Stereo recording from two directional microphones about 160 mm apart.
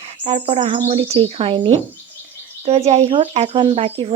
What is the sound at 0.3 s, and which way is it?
Speech, 35° right (ahead or behind).